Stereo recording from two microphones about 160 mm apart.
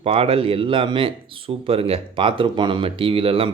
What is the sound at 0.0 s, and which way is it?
Speech, 40° right (ahead or behind).